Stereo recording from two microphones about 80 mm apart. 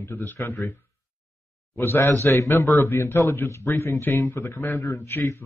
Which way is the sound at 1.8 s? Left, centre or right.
Left.